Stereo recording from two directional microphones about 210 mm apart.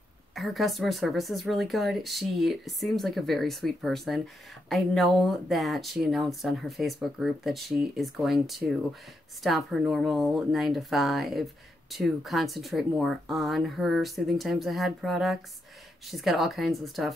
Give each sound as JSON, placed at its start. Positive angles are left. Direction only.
{"t": 0.3, "sound": "speech", "side_deg": 0}